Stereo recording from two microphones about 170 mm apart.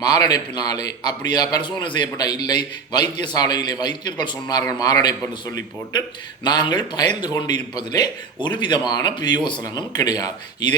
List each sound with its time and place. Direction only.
0.0 s a man's voice: 25° left (ahead or behind)
6.4 s a man's voice: 25° left (ahead or behind)